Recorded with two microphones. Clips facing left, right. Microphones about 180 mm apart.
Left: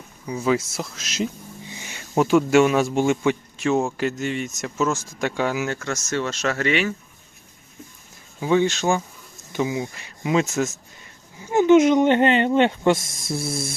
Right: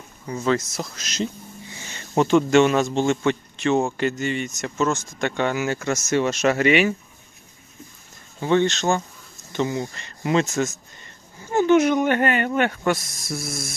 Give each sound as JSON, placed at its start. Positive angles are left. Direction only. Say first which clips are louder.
{"t": 0.3, "sound": "a man's voice", "louder": "left 1 dB", "side_deg": 10}
{"t": 1.6, "sound": "a man's voice", "louder": "left 1 dB", "side_deg": 15}
{"t": 5.7, "sound": "speech", "louder": "right 4 dB", "side_deg": -10}
{"t": 8.4, "sound": "speech", "louder": "even", "side_deg": 5}
{"t": 11.4, "sound": "speech", "louder": "left 3 dB", "side_deg": 20}